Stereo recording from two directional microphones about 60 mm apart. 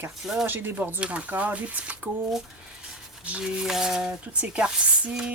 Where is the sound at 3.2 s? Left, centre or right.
Centre.